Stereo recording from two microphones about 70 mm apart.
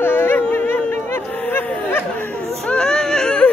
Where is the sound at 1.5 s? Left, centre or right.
Left.